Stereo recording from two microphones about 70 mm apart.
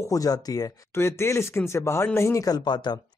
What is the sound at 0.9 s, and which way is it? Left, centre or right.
A man's voice, left.